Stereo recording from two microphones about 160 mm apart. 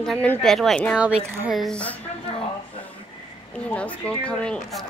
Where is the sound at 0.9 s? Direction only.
5° right (ahead or behind).